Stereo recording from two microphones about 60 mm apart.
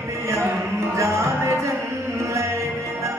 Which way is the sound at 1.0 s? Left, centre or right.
Right.